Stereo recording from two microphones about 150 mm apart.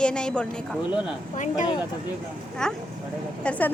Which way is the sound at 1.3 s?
55° left (ahead or behind).